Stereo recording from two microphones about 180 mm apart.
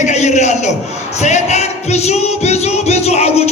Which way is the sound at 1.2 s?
40° left (ahead or behind).